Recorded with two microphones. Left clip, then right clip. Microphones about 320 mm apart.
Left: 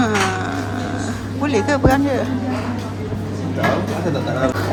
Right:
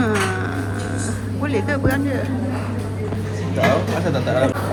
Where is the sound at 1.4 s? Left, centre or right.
Centre.